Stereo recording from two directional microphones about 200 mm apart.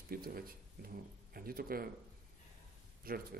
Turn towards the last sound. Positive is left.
turn(degrees=-45)  # may be behind; listen again after turning